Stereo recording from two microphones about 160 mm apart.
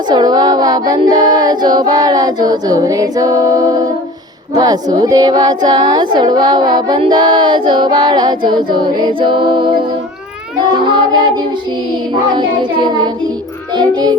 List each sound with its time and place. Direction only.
0.1 s speech: 25° right (ahead or behind)